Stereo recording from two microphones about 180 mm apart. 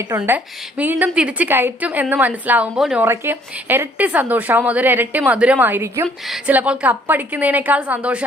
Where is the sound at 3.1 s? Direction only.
10° right (ahead or behind).